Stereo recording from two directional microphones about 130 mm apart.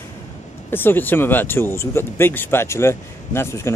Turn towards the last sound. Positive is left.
turn(degrees=20)  # may be behind; listen again after turning